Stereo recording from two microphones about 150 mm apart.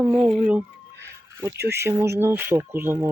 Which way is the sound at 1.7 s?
15° right (ahead or behind).